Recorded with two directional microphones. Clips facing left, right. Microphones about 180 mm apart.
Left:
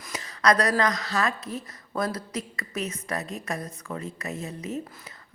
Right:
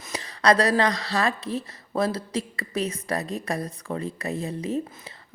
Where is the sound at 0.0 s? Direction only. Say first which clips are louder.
Right 2 dB; 30° right (ahead or behind).